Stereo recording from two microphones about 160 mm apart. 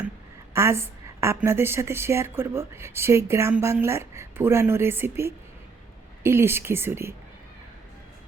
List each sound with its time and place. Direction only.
0.5 s a woman's voice: 15° right (ahead or behind)